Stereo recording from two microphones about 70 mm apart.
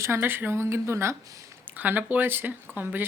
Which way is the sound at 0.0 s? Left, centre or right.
Right.